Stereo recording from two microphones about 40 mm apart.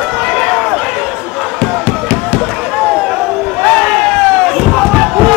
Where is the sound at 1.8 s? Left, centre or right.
Left.